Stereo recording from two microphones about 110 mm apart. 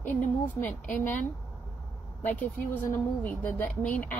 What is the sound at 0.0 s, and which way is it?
A woman's voice, 15° left (ahead or behind).